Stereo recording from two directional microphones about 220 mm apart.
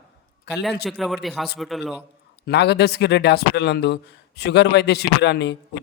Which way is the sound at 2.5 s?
50° left (ahead or behind).